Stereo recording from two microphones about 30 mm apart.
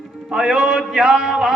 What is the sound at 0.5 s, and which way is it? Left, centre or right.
Speech, right.